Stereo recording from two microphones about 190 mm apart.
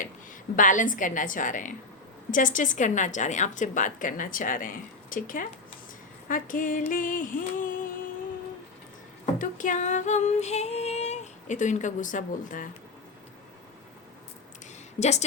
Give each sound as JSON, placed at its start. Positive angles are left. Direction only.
{"t": 0.5, "sound": "a woman's voice", "side_deg": 45}
{"t": 9.4, "sound": "female singing", "side_deg": 45}
{"t": 14.9, "sound": "a woman's voice", "side_deg": 35}